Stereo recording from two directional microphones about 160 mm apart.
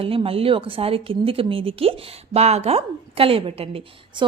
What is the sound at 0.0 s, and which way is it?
A woman's voice, 35° right (ahead or behind).